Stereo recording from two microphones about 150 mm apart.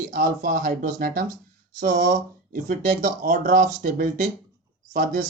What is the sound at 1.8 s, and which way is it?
Speech, 60° right (ahead or behind).